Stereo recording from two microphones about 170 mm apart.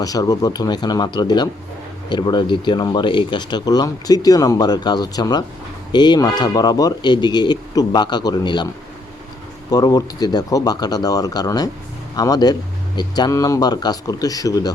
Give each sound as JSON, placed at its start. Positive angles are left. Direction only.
{"t": 0.0, "sound": "speech", "side_deg": 20}